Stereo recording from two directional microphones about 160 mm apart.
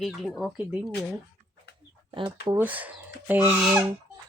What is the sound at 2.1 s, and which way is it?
Speech, 30° right (ahead or behind).